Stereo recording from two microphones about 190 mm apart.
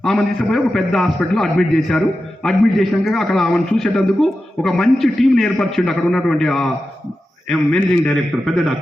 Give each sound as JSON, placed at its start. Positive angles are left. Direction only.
{"t": 0.0, "sound": "a man's voice", "side_deg": 0}